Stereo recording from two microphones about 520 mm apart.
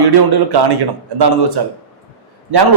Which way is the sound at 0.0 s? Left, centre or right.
Right.